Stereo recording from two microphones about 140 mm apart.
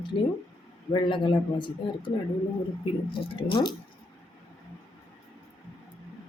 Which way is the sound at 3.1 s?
35° left (ahead or behind).